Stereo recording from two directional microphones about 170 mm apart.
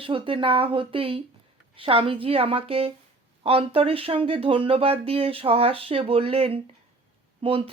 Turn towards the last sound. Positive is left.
turn(degrees=-35)  # may be behind; listen again after turning